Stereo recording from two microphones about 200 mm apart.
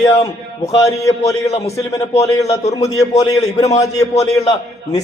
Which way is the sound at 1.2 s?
30° left (ahead or behind).